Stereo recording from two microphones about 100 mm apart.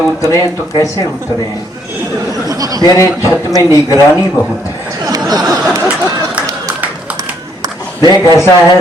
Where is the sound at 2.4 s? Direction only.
35° right (ahead or behind).